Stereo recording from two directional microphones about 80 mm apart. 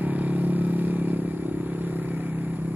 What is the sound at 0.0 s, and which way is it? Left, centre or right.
Vehicle, centre.